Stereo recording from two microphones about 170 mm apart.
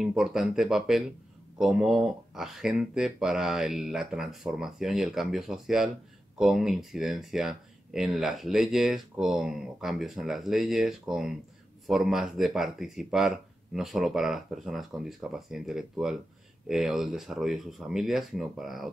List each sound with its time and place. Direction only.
0.0 s speech: 5° right (ahead or behind)